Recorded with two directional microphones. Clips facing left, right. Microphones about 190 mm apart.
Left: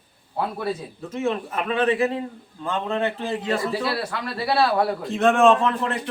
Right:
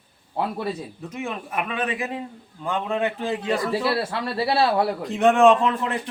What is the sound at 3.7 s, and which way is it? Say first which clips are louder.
A man's voice: right 2 dB; 30° right (ahead or behind).